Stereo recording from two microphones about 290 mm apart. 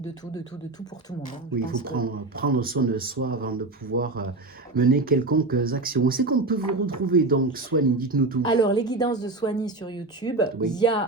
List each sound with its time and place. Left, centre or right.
1.5 s a man's voice: right
8.4 s a woman's voice: centre